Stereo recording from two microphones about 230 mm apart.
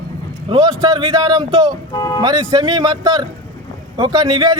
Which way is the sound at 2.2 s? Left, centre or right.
Centre.